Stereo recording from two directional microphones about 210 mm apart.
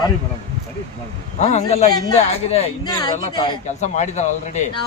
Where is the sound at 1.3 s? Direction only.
35° left (ahead or behind).